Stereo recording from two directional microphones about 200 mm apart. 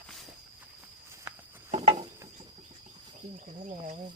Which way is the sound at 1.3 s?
10° right (ahead or behind).